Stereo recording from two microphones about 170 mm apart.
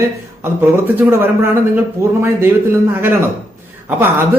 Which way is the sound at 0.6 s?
15° right (ahead or behind).